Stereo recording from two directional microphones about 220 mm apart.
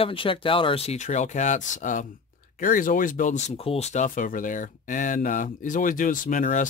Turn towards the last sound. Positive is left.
turn(degrees=35)  # may be behind; listen again after turning